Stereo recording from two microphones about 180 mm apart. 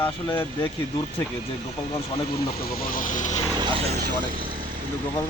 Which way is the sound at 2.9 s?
45° left (ahead or behind).